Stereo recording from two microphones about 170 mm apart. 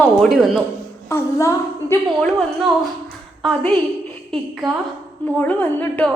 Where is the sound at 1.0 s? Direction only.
15° left (ahead or behind).